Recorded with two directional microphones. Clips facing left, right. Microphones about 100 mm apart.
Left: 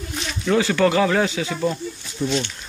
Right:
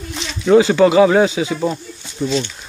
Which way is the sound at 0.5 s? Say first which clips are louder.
Right 7 dB; 20° right (ahead or behind).